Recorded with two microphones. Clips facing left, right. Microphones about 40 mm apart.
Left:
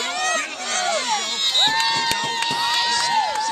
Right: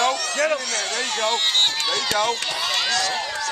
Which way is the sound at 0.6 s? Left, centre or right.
Left.